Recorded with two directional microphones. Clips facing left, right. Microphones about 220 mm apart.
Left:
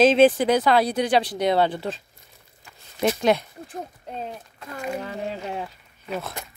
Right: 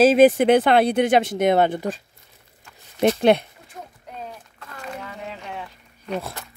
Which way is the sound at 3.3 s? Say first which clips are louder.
Right 3 dB; 60° right (ahead or behind).